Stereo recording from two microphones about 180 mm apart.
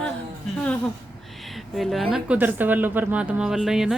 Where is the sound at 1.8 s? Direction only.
Centre (ahead or behind).